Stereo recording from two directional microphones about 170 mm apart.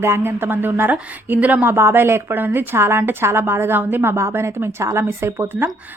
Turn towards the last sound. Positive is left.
turn(degrees=-10)  # may be behind; listen again after turning